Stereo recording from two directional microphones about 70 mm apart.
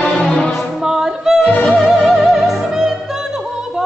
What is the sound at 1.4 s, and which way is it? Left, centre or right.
Music, centre.